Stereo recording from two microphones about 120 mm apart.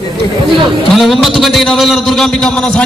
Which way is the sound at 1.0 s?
Centre (ahead or behind).